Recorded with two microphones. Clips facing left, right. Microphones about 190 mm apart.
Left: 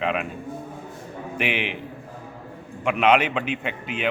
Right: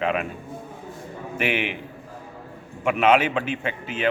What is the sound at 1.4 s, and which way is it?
Speech, 45° right (ahead or behind).